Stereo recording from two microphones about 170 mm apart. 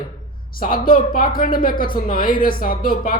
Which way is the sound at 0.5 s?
55° left (ahead or behind).